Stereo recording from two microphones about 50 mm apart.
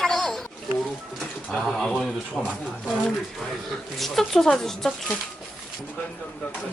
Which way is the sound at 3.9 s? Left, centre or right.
Centre.